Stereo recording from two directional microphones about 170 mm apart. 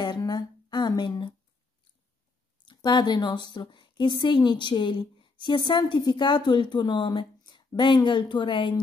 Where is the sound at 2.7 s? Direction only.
25° left (ahead or behind).